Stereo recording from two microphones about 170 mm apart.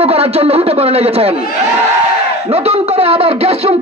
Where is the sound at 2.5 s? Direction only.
35° right (ahead or behind).